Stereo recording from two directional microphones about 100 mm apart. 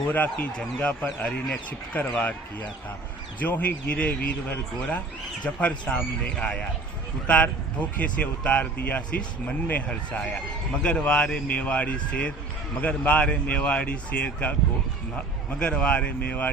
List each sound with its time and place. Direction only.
0.1 s speech: 15° left (ahead or behind)
3.4 s speech: 15° left (ahead or behind)
15.5 s speech: 10° left (ahead or behind)